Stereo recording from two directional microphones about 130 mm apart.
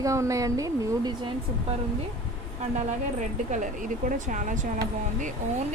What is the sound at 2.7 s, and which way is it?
Speech, 70° right (ahead or behind).